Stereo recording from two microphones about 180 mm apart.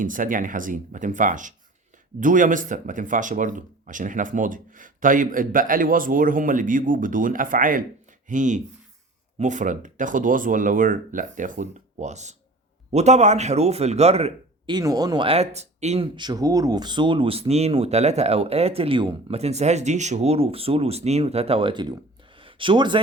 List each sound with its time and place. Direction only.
0.0 s speech: 50° right (ahead or behind)
14.7 s speech: 20° right (ahead or behind); by 16.0 s 40° right (ahead or behind)
16.1 s speech: 25° right (ahead or behind)
22.4 s a sound: 30° right (ahead or behind)